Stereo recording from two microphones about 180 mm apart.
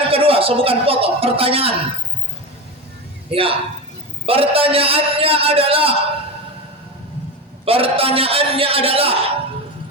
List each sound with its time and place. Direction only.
0.1 s speech: 30° right (ahead or behind)
3.2 s a man's voice: 30° right (ahead or behind)
7.6 s a man's voice: 30° right (ahead or behind)